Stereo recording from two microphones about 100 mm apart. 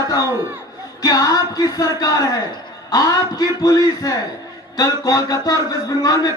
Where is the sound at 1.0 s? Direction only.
35° left (ahead or behind).